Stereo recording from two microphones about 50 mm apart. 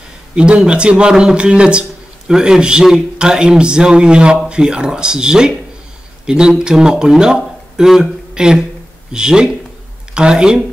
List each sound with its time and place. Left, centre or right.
0.7 s a man's voice: right